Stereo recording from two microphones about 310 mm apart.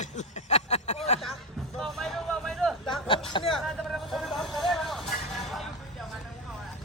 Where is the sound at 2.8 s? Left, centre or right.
Centre.